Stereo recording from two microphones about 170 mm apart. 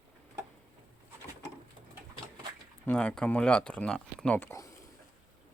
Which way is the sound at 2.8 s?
10° left (ahead or behind).